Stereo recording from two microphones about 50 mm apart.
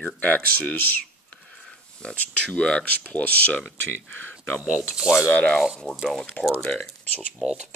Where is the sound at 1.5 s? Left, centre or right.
Centre; by 4.4 s left.